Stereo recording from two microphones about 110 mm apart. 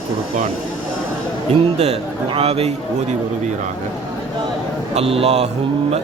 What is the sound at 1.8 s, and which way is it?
Speech, 70° right (ahead or behind).